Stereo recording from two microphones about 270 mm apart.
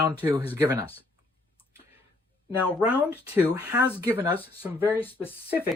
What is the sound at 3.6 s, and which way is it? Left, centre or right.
Speech, centre.